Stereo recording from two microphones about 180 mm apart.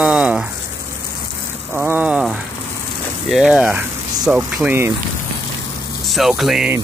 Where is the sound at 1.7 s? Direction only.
10° right (ahead or behind).